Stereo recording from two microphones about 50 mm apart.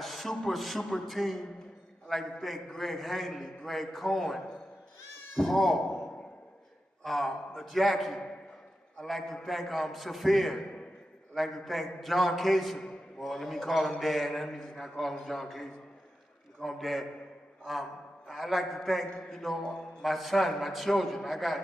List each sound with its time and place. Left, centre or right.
0.0 s a man's voice: centre
5.4 s a man's voice: centre
7.0 s a man's voice: centre
12.7 s a sound: centre
13.3 s a man's voice: centre
18.3 s a man's voice: centre